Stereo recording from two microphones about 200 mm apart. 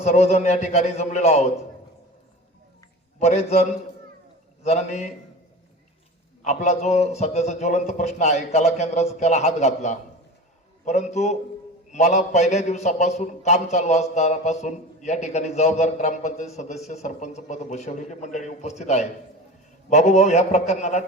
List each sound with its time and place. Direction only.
0.0 s a man's voice: 30° left (ahead or behind)
3.2 s a man's voice: 30° left (ahead or behind)
6.4 s a man's voice: 35° left (ahead or behind)